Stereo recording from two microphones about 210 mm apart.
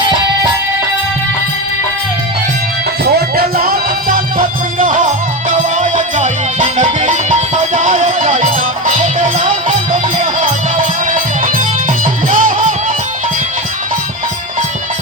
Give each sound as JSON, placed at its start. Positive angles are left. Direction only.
{"t": 3.0, "sound": "music", "side_deg": -45}